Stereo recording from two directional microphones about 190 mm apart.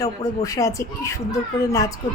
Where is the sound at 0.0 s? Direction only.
15° left (ahead or behind).